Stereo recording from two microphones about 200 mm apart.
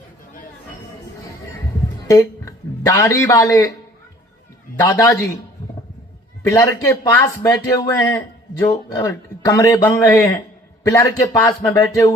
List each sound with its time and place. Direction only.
2.0 s a man's voice: 15° left (ahead or behind)
4.8 s speech: 15° left (ahead or behind)
6.4 s speech: 15° left (ahead or behind)